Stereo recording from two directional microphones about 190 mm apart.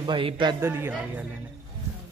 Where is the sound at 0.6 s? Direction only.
10° right (ahead or behind).